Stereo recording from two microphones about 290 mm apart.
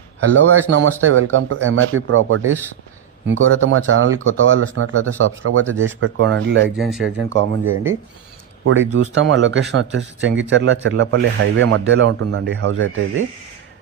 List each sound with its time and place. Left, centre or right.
0.2 s speech: right
5.6 s speech: centre
6.0 s speech: right
6.7 s speech: centre
7.0 s speech: right